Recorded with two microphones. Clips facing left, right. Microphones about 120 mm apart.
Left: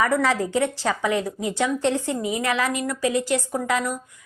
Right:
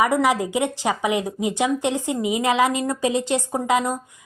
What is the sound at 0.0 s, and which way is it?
A woman's voice, 15° right (ahead or behind).